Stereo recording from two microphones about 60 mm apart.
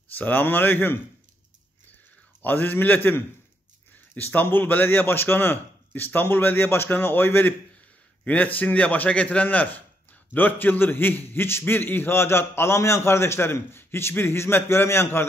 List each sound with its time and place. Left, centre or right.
0.1 s a man's voice: left
2.4 s a man's voice: left